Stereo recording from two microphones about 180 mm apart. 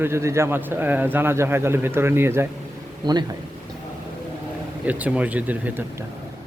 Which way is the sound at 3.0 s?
25° right (ahead or behind).